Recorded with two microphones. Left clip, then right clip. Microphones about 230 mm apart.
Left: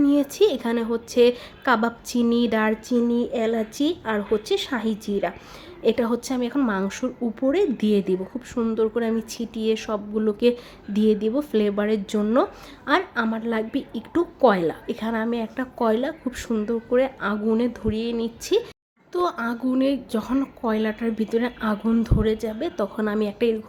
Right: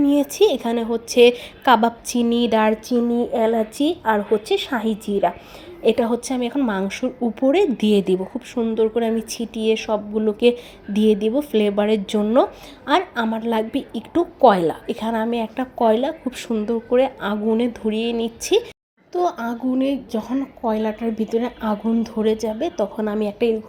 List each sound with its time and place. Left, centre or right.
0.0 s speech: centre
5.1 s a woman's voice: right
5.8 s speech: centre
19.4 s speech: centre